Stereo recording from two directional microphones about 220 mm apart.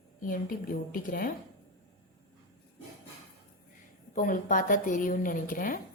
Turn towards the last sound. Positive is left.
turn(degrees=40)  # may be behind; listen again after turning